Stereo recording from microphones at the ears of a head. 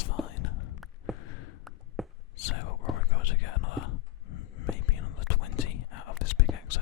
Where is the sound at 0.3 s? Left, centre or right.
Left.